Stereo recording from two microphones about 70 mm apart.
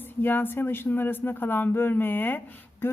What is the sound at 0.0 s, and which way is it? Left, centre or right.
Speech, left.